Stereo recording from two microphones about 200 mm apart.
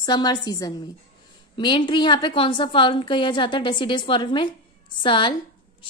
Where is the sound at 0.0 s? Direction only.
20° left (ahead or behind).